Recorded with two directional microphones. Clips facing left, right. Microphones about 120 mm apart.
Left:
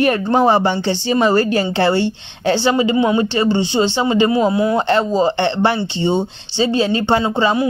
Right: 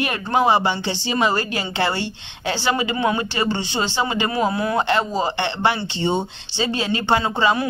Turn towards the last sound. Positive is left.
turn(degrees=30)  # may be behind; listen again after turning